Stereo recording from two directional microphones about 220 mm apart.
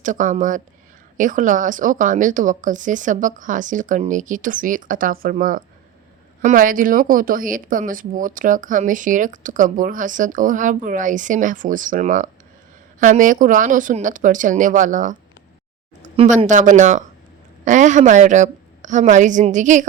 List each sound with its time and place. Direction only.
0.0 s speech: 35° right (ahead or behind)